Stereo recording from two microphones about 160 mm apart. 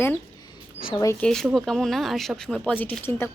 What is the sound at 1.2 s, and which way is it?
A woman's voice, 5° left (ahead or behind).